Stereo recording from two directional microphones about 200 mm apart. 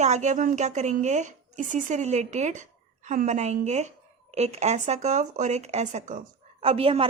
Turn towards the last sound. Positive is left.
turn(degrees=-30)  # may be behind; listen again after turning